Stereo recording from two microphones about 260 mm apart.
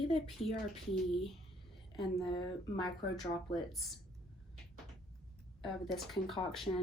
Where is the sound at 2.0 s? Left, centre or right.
Centre.